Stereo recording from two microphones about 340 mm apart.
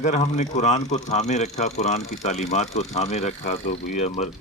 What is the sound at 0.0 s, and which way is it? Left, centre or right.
Speech, left.